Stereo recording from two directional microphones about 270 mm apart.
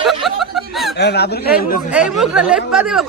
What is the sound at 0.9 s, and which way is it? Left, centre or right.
Speech, left.